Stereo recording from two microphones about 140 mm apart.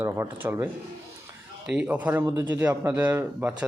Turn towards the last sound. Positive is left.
turn(degrees=-10)  # may be behind; listen again after turning